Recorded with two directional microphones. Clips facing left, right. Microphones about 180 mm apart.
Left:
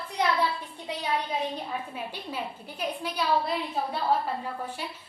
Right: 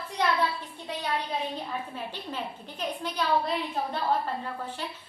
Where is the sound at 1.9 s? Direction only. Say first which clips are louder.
Left 1 dB; 10° left (ahead or behind).